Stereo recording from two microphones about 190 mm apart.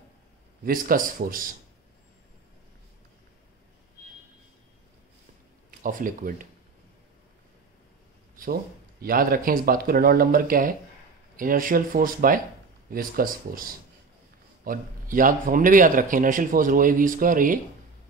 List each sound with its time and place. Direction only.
0.7 s a man's voice: 45° right (ahead or behind)
5.7 s speech: 45° right (ahead or behind)
9.0 s a man's voice: 50° right (ahead or behind)